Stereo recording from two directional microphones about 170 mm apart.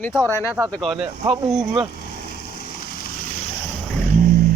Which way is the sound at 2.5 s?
65° left (ahead or behind).